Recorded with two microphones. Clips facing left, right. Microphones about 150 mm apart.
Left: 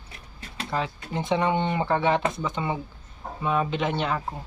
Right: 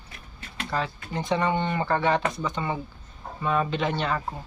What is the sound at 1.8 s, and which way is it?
Speech, 5° left (ahead or behind).